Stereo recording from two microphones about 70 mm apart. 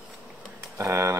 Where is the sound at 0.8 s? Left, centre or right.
Right.